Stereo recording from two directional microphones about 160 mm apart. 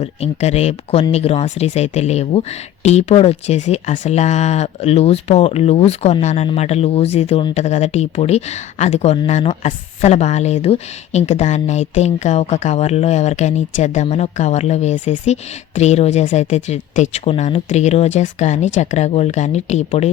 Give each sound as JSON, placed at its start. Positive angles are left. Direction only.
{"t": 0.0, "sound": "speech", "side_deg": 45}